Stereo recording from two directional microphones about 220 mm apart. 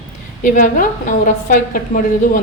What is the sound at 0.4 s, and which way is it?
A woman's voice, 35° left (ahead or behind).